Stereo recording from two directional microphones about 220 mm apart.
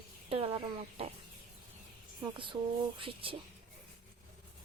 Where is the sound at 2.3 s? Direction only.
20° right (ahead or behind).